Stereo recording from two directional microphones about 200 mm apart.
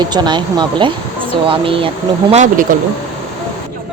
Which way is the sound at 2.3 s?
35° right (ahead or behind).